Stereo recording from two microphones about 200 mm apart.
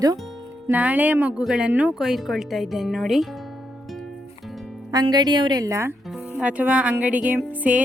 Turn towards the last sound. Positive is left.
turn(degrees=-5)  # may be behind; listen again after turning